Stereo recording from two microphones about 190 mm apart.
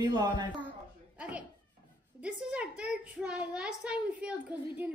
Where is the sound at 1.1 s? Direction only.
5° right (ahead or behind).